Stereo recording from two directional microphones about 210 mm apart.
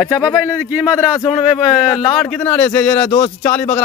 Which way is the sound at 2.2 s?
10° left (ahead or behind).